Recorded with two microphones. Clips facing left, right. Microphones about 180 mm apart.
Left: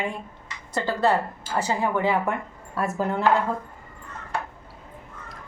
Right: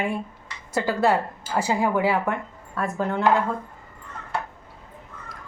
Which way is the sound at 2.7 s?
5° left (ahead or behind).